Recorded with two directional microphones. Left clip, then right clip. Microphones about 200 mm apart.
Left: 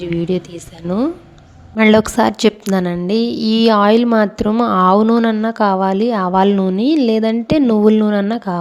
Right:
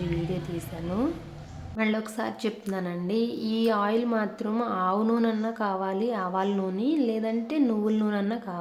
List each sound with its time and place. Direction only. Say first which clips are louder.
0.3 s speech: left 14 dB; 40° left (ahead or behind)
1.7 s a woman's voice: left 17 dB; 50° left (ahead or behind)